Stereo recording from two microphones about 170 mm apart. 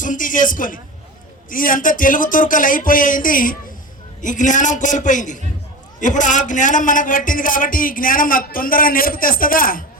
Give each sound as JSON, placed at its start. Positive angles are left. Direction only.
{"t": 0.0, "sound": "a man's voice", "side_deg": 50}